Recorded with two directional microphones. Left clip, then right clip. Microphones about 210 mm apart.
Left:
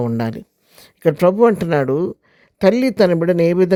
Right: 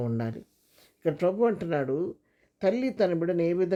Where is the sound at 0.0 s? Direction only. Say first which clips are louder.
Left 11 dB; 45° left (ahead or behind).